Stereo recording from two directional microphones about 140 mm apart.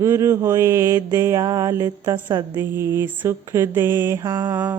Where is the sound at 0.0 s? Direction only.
20° right (ahead or behind).